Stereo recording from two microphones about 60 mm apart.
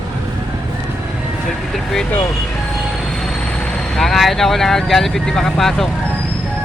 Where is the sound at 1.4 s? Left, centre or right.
Centre.